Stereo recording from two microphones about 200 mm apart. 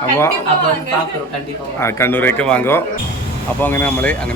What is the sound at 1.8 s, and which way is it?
Speech, 15° left (ahead or behind).